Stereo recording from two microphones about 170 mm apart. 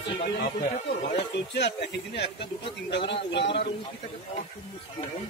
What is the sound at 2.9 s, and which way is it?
Speech, 90° left.